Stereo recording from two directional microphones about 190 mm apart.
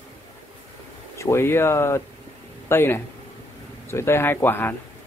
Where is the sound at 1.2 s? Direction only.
15° left (ahead or behind).